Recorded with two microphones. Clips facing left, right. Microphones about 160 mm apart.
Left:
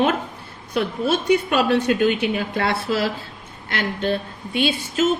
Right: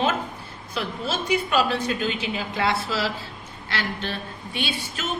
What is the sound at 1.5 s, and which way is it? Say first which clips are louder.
A woman's voice: left 5 dB; 60° left (ahead or behind).